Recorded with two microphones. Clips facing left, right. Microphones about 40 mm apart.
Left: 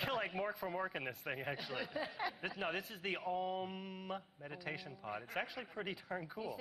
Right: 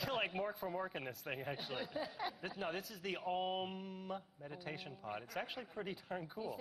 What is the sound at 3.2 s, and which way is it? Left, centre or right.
Mantra, right.